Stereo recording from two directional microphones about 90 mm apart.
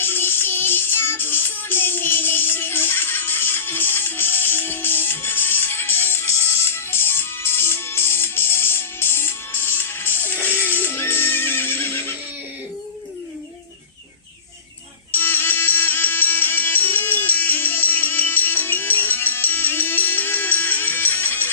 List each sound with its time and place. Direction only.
0.0 s music: 25° left (ahead or behind)
15.1 s music: 25° left (ahead or behind)